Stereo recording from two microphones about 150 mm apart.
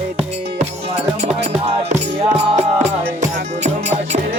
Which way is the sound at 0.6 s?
45° right (ahead or behind).